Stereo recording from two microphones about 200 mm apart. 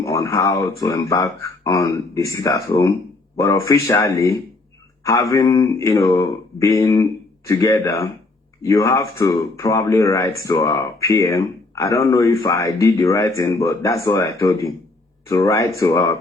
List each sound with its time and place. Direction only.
0.0 s speech: 15° left (ahead or behind)